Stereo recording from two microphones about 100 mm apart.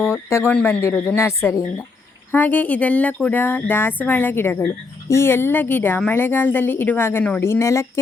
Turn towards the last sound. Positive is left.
turn(degrees=30)  # may be behind; listen again after turning